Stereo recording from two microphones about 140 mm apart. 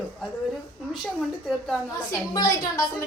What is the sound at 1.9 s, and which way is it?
Speech, 25° left (ahead or behind).